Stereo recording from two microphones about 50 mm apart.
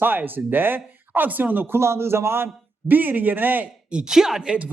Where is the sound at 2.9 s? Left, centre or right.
Right.